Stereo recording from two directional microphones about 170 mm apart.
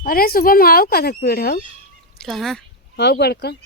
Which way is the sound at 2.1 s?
Centre (ahead or behind).